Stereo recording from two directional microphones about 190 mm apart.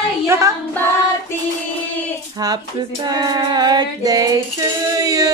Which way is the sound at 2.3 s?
20° right (ahead or behind).